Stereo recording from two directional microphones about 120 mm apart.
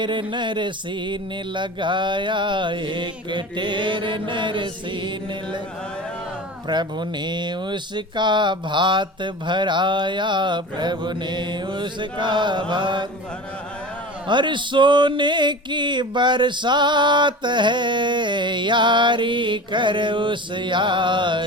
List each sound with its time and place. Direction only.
0.0 s music: 40° right (ahead or behind)
6.7 s music: 35° right (ahead or behind)
14.3 s music: 40° right (ahead or behind)